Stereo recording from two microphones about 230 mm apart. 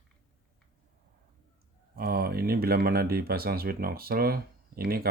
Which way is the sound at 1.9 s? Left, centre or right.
Right.